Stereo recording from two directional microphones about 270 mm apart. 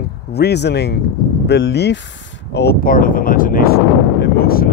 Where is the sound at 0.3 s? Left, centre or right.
Left.